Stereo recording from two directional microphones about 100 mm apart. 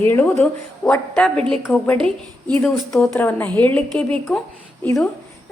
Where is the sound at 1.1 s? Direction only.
10° left (ahead or behind).